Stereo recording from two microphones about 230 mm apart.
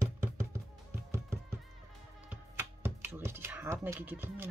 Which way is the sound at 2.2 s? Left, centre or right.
Centre.